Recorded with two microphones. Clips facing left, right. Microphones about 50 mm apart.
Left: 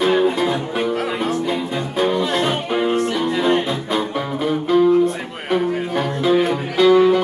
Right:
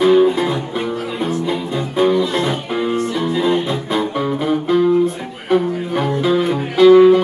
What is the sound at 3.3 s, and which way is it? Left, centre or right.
Music, left.